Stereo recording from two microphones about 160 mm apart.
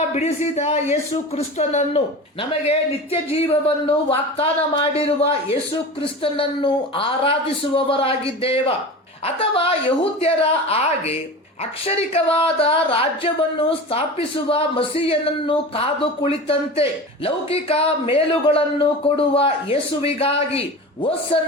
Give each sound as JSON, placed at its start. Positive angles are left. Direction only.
{"t": 0.1, "sound": "speech", "side_deg": 45}